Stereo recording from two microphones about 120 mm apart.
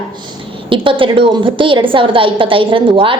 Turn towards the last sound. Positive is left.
turn(degrees=-45)  # may be behind; listen again after turning